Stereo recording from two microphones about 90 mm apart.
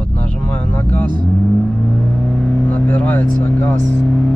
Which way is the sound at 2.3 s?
10° left (ahead or behind).